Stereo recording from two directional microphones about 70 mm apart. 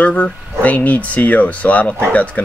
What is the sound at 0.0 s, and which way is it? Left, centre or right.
Speech, left.